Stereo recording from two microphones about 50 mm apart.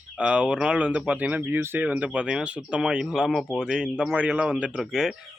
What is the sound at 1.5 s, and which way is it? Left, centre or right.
Speech, right.